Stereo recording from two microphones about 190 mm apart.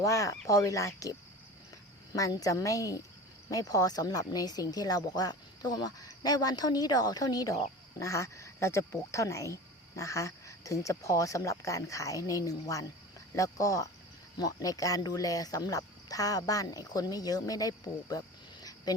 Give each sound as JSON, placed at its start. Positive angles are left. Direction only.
{"t": 0.0, "sound": "speech", "side_deg": 15}
{"t": 2.1, "sound": "speech", "side_deg": 20}